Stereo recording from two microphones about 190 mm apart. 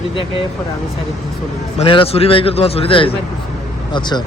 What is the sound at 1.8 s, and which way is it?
A man's voice, 30° left (ahead or behind).